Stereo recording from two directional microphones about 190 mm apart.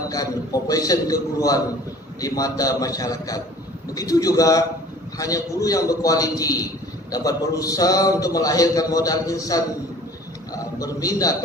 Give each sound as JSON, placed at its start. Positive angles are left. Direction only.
{"t": 0.1, "sound": "a man's voice", "side_deg": 20}
{"t": 10.8, "sound": "a man's voice", "side_deg": 20}